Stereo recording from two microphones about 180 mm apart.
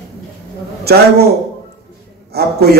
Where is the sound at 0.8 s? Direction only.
60° right (ahead or behind).